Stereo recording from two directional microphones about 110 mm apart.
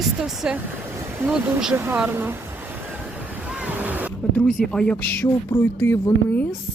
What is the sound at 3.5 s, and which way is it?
Waves, 15° right (ahead or behind).